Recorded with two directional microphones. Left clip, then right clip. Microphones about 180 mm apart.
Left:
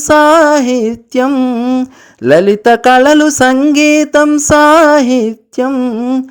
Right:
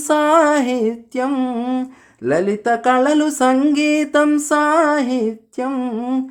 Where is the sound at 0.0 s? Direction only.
35° left (ahead or behind).